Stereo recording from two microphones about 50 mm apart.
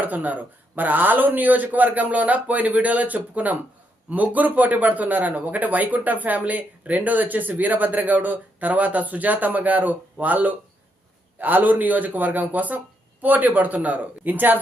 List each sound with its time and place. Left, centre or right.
0.0 s speech: right